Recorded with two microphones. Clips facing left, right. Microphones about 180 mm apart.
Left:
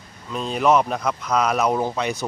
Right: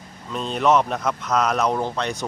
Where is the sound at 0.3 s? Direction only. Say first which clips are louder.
Left 1 dB; centre (ahead or behind).